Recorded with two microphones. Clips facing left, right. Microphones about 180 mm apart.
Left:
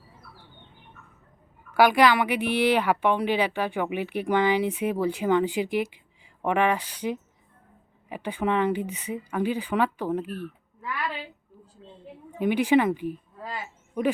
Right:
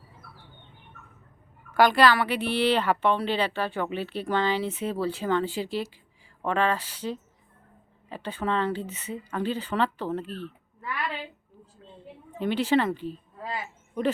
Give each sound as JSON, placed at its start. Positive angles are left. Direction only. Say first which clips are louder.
{"t": 1.7, "sound": "a woman's voice", "louder": "left 1 dB", "side_deg": 10}
{"t": 12.4, "sound": "a woman's voice", "louder": "left 3 dB", "side_deg": 15}